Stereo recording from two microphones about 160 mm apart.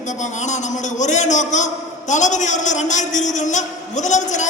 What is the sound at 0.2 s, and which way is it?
A man's voice, 50° left (ahead or behind).